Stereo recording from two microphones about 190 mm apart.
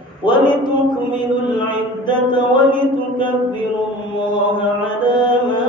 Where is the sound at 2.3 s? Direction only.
25° left (ahead or behind).